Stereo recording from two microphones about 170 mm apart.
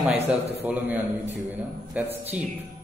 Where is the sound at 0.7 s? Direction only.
10° right (ahead or behind).